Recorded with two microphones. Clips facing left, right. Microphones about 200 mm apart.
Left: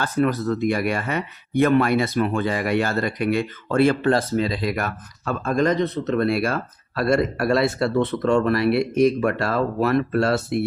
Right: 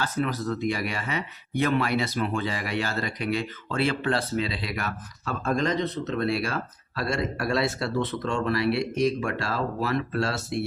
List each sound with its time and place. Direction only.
0.0 s speech: 55° left (ahead or behind)